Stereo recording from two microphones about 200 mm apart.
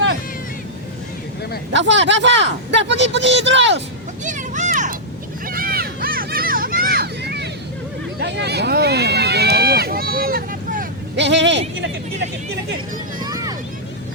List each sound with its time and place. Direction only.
1.7 s speech: 65° right (ahead or behind)
4.2 s a sound: 40° right (ahead or behind)
5.5 s children playing: 45° right (ahead or behind)
8.2 s run: 60° right (ahead or behind)
11.2 s speech: 60° right (ahead or behind)
13.1 s a sound: 20° right (ahead or behind)